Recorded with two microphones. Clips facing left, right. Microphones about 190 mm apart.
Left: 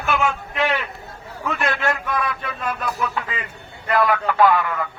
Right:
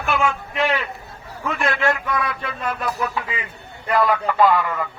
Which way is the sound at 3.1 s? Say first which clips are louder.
Even; 5° right (ahead or behind).